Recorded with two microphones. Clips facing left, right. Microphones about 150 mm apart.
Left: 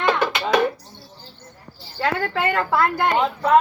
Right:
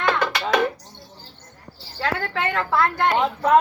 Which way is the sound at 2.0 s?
5° left (ahead or behind).